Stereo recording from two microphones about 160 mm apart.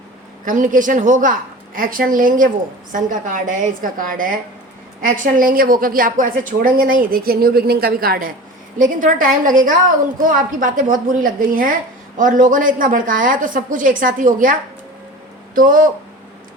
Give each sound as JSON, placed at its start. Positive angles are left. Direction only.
{"t": 0.4, "sound": "a woman's voice", "side_deg": -55}
{"t": 15.5, "sound": "a woman's voice", "side_deg": -60}